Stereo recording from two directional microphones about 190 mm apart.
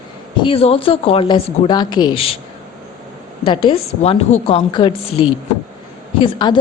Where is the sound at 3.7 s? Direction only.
30° left (ahead or behind).